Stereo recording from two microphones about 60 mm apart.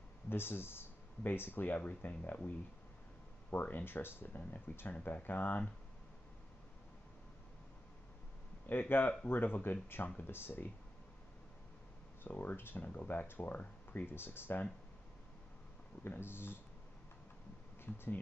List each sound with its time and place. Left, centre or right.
0.3 s speech: left
8.6 s speech: left
12.3 s speech: left
16.0 s speech: left